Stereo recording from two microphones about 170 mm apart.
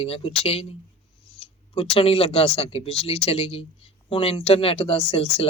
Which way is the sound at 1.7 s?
35° left (ahead or behind).